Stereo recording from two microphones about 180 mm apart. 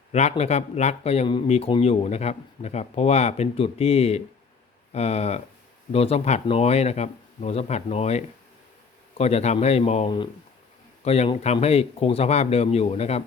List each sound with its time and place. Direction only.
0.1 s speech: 40° left (ahead or behind)